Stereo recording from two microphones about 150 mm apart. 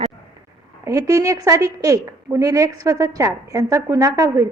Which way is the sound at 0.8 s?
25° right (ahead or behind).